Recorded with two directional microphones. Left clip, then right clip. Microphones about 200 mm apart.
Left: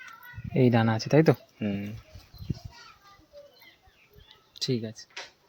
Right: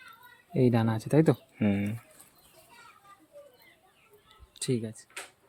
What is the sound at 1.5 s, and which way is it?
Speech, 55° right (ahead or behind).